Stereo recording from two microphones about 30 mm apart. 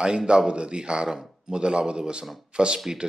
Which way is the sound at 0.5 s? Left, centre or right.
Right.